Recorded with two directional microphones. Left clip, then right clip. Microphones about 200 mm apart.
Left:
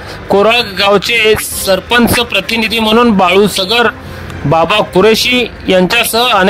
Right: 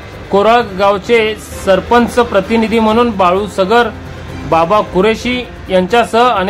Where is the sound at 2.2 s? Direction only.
10° left (ahead or behind).